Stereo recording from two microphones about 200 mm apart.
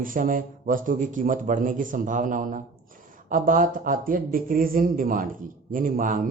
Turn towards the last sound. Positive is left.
turn(degrees=-40)  # may be behind; listen again after turning